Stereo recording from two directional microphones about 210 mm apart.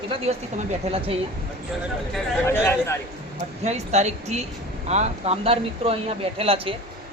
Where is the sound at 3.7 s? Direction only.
30° right (ahead or behind).